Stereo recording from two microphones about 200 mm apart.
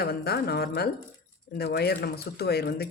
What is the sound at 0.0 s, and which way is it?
Speech, 50° left (ahead or behind).